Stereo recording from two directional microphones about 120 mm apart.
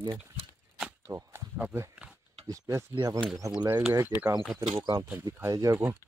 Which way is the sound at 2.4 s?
30° right (ahead or behind).